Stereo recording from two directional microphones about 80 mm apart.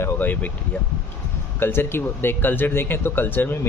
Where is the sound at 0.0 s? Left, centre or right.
Left.